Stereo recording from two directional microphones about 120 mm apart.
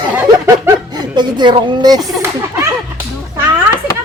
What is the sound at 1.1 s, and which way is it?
Speech, 40° right (ahead or behind).